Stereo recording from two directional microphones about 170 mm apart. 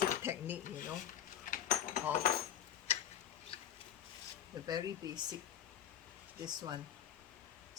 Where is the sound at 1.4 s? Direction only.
55° left (ahead or behind).